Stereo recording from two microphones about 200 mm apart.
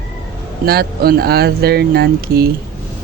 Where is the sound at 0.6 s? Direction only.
50° right (ahead or behind).